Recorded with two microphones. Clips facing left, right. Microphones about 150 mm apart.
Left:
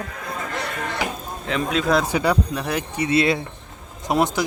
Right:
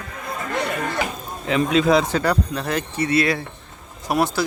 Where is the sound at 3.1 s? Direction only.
25° left (ahead or behind).